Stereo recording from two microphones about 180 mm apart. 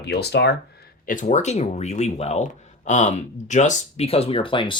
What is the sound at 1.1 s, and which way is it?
Speech, 45° left (ahead or behind).